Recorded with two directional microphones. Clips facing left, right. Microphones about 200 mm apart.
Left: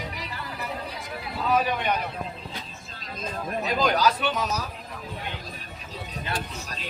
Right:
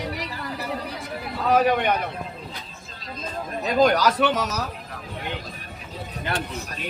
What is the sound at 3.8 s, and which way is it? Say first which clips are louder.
Speech: right 6 dB; 80° right.